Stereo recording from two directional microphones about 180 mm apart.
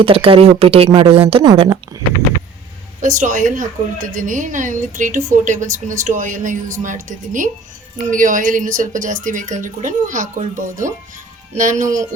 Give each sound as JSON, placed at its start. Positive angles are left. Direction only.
{"t": 0.0, "sound": "speech", "side_deg": -30}
{"t": 3.0, "sound": "a woman's voice", "side_deg": -45}